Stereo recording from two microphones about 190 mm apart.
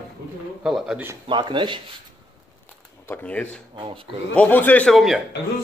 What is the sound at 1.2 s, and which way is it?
Speech, 25° right (ahead or behind).